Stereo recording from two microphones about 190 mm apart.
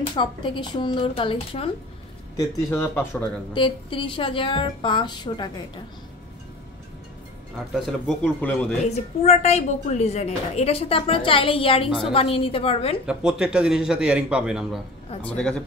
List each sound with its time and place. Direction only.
0.1 s a woman's voice: 25° left (ahead or behind)
2.3 s speech: 15° left (ahead or behind)
3.5 s a woman's voice: 25° left (ahead or behind)
7.7 s a man's voice: centre (ahead or behind)
9.2 s a woman's voice: 35° left (ahead or behind)
13.0 s a man's voice: 5° right (ahead or behind)